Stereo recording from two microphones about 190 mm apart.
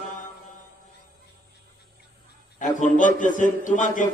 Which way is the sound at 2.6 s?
40° left (ahead or behind).